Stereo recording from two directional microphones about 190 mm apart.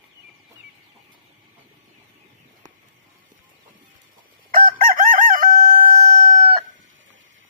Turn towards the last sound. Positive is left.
turn(degrees=-45)  # may be behind; listen again after turning